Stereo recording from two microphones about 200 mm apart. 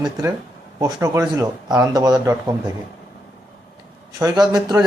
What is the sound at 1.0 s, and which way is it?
A man's voice, 15° right (ahead or behind).